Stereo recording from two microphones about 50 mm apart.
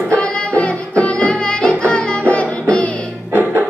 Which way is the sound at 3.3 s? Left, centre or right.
Right.